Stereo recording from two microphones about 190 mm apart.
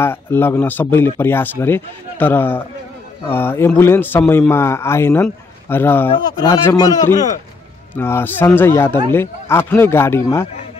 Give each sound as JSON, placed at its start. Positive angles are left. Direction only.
{"t": 0.0, "sound": "speech", "side_deg": 10}